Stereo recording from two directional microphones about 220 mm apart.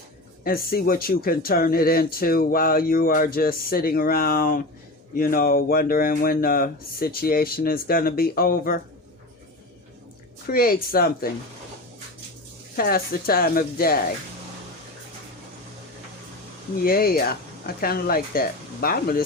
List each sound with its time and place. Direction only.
0.4 s speech: 40° left (ahead or behind)
10.4 s speech: 40° left (ahead or behind)
12.7 s speech: 40° left (ahead or behind)
16.8 s speech: 40° left (ahead or behind)